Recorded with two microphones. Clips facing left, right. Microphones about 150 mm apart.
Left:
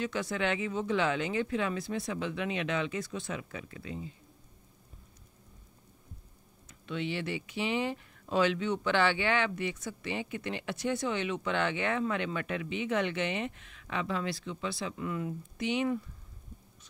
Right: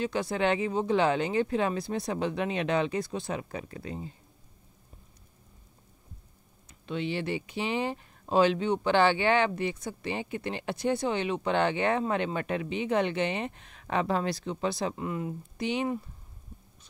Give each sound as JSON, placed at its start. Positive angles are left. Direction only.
{"t": 0.0, "sound": "speech", "side_deg": -30}
{"t": 6.7, "sound": "speech", "side_deg": -30}